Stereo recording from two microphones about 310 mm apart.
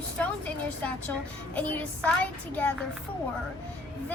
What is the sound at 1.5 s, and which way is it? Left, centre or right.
Child singing, centre.